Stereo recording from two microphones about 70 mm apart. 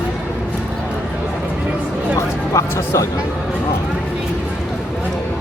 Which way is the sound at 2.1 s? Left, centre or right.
Left.